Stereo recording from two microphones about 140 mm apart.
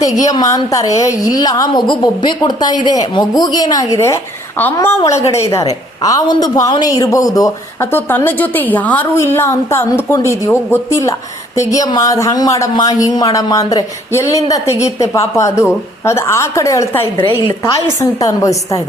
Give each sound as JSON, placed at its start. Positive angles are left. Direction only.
{"t": 0.0, "sound": "a woman's voice", "side_deg": 25}